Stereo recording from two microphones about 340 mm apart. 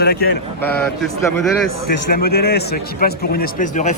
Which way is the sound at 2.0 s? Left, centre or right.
Left.